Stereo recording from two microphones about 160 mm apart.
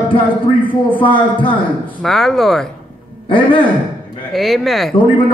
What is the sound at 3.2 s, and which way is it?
Speech, 30° left (ahead or behind).